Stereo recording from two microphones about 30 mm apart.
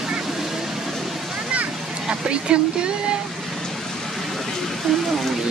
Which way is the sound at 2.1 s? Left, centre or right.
Right.